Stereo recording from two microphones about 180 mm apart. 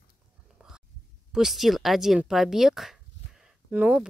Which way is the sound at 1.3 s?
Centre (ahead or behind).